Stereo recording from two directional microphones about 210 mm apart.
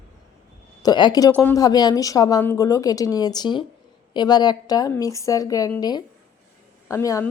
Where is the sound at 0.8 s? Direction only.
20° left (ahead or behind).